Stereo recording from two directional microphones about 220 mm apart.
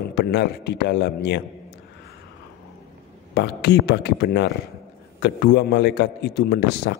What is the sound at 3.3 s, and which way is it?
A man's voice, 50° left (ahead or behind).